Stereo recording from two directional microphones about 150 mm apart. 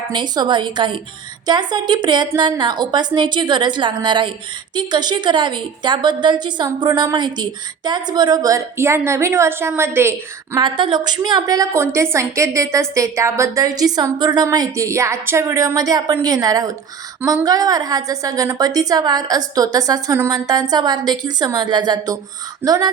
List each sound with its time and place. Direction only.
0.1 s a woman's voice: 30° right (ahead or behind)
10.6 s a woman's voice: 30° right (ahead or behind)